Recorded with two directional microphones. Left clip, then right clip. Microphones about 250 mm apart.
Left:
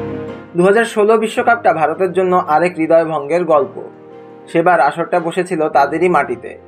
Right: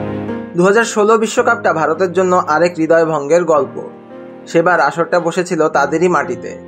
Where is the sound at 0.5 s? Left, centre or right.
Right.